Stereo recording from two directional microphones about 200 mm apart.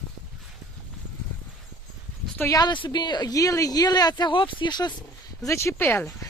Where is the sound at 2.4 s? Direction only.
15° left (ahead or behind).